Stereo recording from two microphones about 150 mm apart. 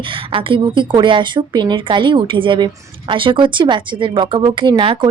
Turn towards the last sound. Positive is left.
turn(degrees=-30)  # may be behind; listen again after turning